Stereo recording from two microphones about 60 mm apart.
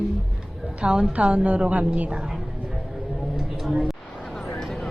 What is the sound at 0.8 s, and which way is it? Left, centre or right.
A woman's voice, centre.